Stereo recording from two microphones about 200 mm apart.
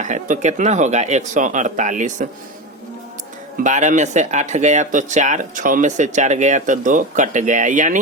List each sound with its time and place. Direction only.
0.0 s speech: 35° right (ahead or behind)
3.6 s speech: 35° right (ahead or behind)